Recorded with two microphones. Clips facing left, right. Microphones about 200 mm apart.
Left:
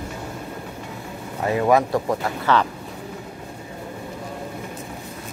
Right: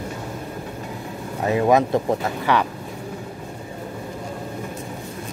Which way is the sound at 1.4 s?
20° right (ahead or behind).